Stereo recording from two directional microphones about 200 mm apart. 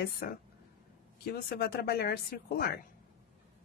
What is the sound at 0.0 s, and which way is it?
Speech, 50° left (ahead or behind).